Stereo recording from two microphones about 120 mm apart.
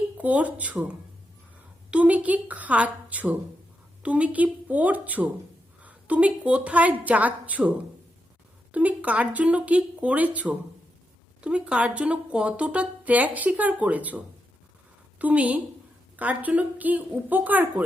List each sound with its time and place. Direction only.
0.2 s speech: 15° right (ahead or behind)
8.7 s speech: 10° right (ahead or behind)
15.2 s speech: 15° right (ahead or behind)